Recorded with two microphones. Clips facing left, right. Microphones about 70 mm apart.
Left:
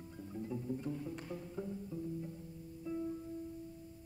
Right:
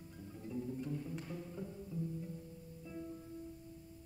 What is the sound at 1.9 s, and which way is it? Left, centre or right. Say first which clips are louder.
Music: right 2 dB; left.